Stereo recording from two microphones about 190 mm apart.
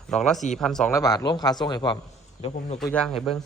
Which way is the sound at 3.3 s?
Centre (ahead or behind).